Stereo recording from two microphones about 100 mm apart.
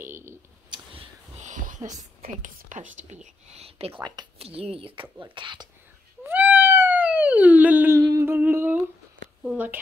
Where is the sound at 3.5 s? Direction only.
90° right.